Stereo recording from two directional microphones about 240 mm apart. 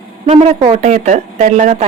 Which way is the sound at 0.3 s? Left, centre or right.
Right.